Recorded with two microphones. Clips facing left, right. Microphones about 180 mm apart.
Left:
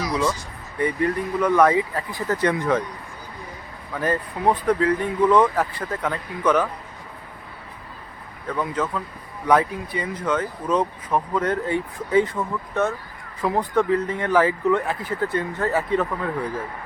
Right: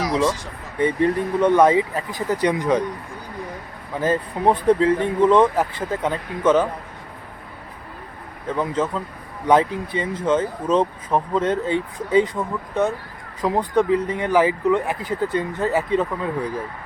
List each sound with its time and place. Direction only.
0.8 s speech: 25° right (ahead or behind)
3.9 s speech: 20° right (ahead or behind)
8.5 s speech: 25° right (ahead or behind)